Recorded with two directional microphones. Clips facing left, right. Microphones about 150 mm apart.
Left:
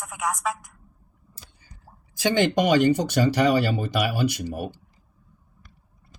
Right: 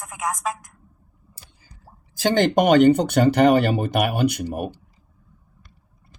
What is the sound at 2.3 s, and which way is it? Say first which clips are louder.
Speech: right 3 dB; 50° right (ahead or behind).